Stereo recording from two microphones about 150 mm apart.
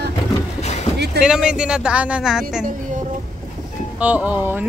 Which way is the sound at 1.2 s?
5° right (ahead or behind).